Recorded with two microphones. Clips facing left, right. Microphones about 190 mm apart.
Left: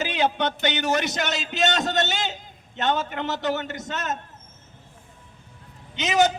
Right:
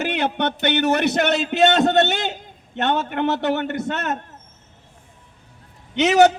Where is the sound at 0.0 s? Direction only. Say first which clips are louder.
Right 2 dB; 60° right (ahead or behind).